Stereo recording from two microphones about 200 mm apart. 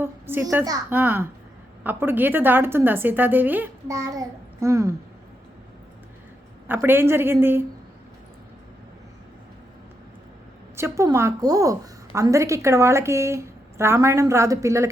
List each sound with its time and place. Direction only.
0.0 s a woman's voice: 10° right (ahead or behind)
6.7 s a woman's voice: 10° right (ahead or behind)
10.8 s a woman's voice: 15° right (ahead or behind)